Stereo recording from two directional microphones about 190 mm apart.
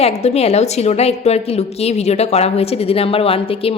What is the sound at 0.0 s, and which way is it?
A woman's voice, 35° left (ahead or behind).